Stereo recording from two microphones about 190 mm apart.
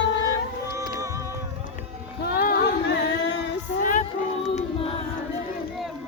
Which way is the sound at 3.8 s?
40° left (ahead or behind).